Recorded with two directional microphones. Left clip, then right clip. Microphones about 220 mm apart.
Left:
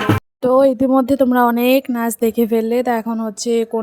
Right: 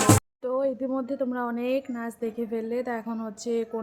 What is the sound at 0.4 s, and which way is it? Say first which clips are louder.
Speech: left 16 dB; 50° left (ahead or behind).